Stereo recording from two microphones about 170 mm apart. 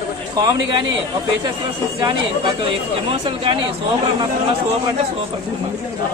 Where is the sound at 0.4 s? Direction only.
25° right (ahead or behind).